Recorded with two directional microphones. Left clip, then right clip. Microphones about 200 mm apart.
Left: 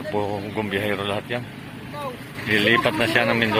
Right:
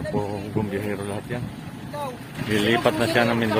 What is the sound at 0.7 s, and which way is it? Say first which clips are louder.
Speech: left 5 dB; centre (ahead or behind).